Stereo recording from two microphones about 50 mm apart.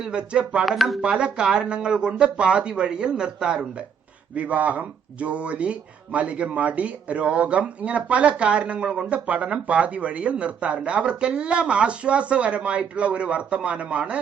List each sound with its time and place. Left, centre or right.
0.0 s speech: centre
0.6 s speech: centre
1.0 s speech: centre